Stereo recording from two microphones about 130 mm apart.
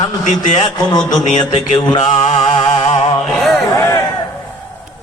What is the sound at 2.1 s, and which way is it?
Mantra, 65° left (ahead or behind).